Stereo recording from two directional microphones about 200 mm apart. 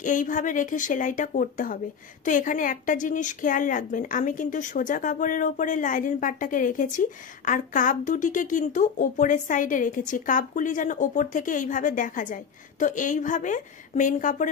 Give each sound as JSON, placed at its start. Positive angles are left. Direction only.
{"t": 0.0, "sound": "speech", "side_deg": 40}